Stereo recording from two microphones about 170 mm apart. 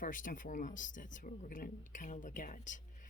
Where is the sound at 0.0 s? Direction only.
50° left (ahead or behind).